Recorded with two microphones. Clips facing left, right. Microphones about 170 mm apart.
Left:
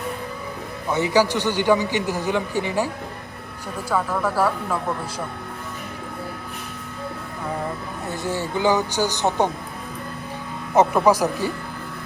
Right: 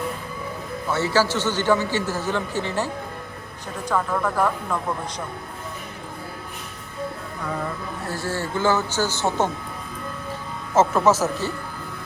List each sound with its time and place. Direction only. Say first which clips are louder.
0.9 s a man's voice: left 2 dB; 15° left (ahead or behind)
8.0 s a man's voice: left 2 dB; 20° left (ahead or behind)
10.8 s a man's voice: left 1 dB; 15° left (ahead or behind)